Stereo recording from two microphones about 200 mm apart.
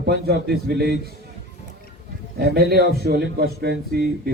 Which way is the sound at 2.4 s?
50° right (ahead or behind).